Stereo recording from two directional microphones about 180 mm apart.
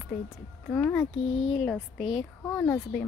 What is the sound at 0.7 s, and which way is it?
Speech, 5° left (ahead or behind).